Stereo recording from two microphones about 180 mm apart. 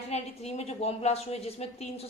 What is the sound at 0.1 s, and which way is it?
A woman's voice, 35° left (ahead or behind).